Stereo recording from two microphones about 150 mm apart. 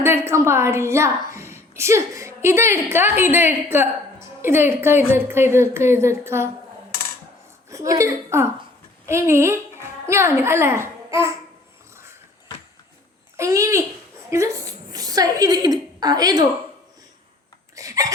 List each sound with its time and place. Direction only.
0.0 s a woman's voice: 15° right (ahead or behind)
7.7 s a woman's voice: 20° right (ahead or behind)
13.3 s a woman's voice: 20° right (ahead or behind)
17.7 s a sound: 20° right (ahead or behind)